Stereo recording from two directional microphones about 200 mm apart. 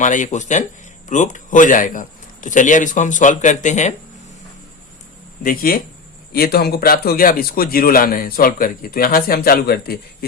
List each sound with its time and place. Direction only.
0.0 s speech: 40° left (ahead or behind)
5.4 s a man's voice: 45° left (ahead or behind)